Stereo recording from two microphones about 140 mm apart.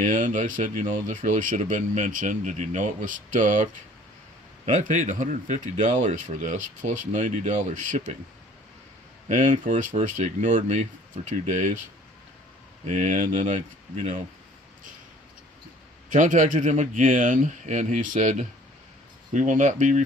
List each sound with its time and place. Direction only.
0.0 s speech: 65° right (ahead or behind)
9.3 s speech: 65° right (ahead or behind)
12.8 s speech: 65° right (ahead or behind)
16.1 s speech: 65° right (ahead or behind)